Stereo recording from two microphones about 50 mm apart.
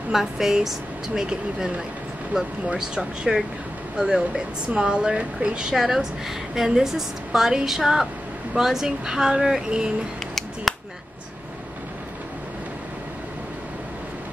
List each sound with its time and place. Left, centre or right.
0.1 s a woman's voice: centre
2.7 s a woman's voice: centre
10.7 s a sound: centre